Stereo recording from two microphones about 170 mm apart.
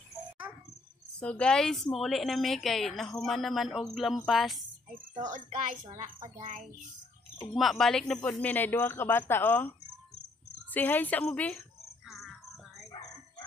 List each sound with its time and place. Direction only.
1.2 s speech: 5° left (ahead or behind)
4.9 s a woman's voice: 50° right (ahead or behind)
7.5 s speech: centre (ahead or behind)
12.1 s music: centre (ahead or behind)